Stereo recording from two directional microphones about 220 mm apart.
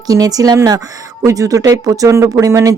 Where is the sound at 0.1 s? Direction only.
15° right (ahead or behind).